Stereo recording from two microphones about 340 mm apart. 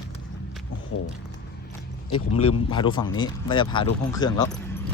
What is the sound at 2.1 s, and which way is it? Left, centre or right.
Speech, left.